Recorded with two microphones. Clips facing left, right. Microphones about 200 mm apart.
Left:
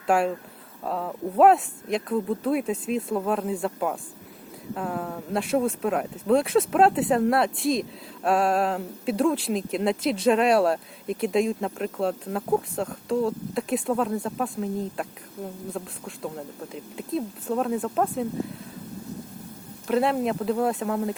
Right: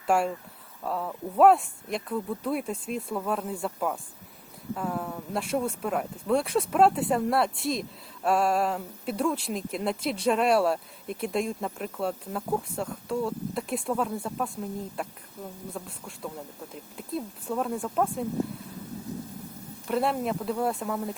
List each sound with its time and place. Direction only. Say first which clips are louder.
0.9 s speech: left 3 dB; centre (ahead or behind)
19.9 s speech: left 4 dB; centre (ahead or behind)